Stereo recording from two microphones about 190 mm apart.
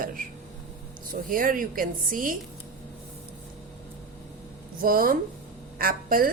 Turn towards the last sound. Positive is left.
turn(degrees=-50)  # may be behind; listen again after turning